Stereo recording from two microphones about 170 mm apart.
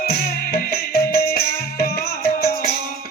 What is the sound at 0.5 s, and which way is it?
Music, 65° left (ahead or behind).